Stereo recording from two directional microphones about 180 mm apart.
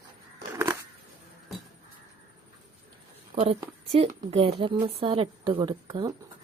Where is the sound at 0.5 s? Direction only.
15° right (ahead or behind).